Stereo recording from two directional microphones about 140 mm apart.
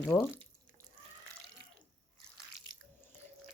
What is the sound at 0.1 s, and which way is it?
Speech, 15° left (ahead or behind).